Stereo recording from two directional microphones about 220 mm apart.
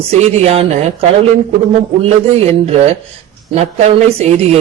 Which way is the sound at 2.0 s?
30° right (ahead or behind).